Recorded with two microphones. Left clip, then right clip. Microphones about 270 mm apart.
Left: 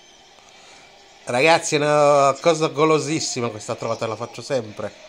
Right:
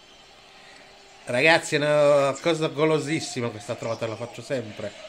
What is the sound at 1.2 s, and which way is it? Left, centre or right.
A man's voice, centre.